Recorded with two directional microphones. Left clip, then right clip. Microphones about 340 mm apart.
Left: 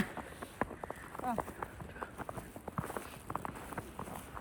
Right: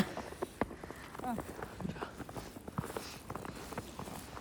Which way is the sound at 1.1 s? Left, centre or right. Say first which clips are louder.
Left 3 dB; centre.